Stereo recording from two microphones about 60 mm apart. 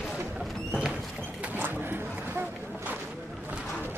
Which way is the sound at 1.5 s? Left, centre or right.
Right.